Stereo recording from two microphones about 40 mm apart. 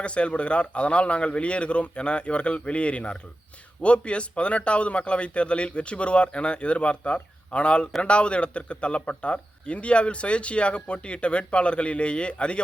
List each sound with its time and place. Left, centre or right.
0.0 s speech: left